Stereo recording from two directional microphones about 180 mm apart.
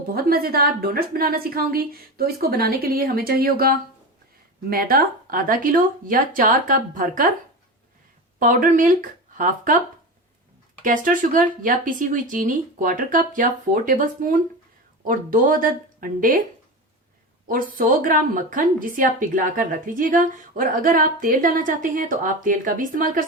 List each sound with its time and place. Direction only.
0.1 s a woman's voice: 55° right (ahead or behind)
8.4 s a woman's voice: 45° right (ahead or behind)
10.8 s a woman's voice: 45° right (ahead or behind)
17.5 s a woman's voice: 50° right (ahead or behind)